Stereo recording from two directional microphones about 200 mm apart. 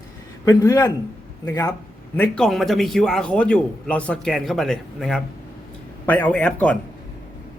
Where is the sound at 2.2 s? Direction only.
5° left (ahead or behind).